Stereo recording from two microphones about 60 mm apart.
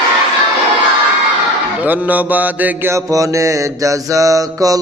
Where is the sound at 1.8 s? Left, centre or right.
Right.